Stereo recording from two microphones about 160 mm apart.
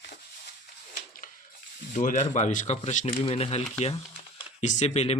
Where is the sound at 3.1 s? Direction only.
35° left (ahead or behind).